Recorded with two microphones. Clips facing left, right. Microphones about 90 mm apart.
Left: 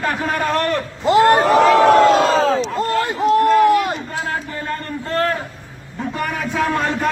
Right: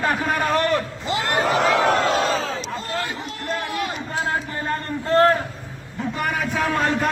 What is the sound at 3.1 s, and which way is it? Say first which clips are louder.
Run: left 15 dB; 55° left (ahead or behind).